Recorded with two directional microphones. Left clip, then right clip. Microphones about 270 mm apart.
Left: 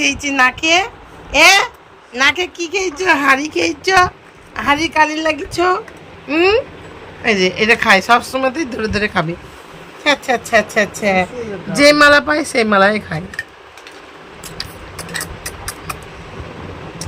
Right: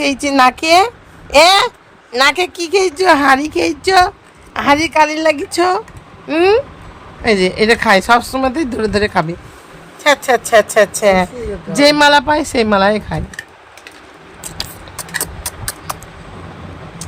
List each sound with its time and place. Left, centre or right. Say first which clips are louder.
0.0 s a woman's voice: right 2 dB; centre
11.8 s a woman's voice: even; centre
14.4 s a sound: right 3 dB; right